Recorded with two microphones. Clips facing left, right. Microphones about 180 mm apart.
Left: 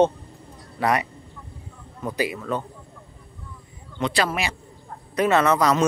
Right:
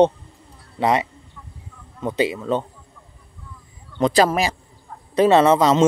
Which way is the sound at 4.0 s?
40° right (ahead or behind).